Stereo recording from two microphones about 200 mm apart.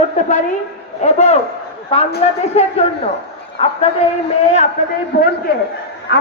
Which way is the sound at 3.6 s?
30° left (ahead or behind).